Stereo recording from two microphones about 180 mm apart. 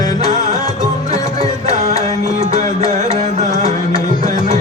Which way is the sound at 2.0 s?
35° right (ahead or behind).